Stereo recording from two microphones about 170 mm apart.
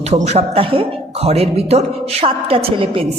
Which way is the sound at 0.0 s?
40° right (ahead or behind).